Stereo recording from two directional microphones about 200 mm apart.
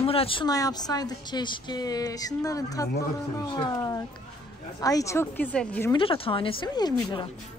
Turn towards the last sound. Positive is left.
turn(degrees=20)  # may be behind; listen again after turning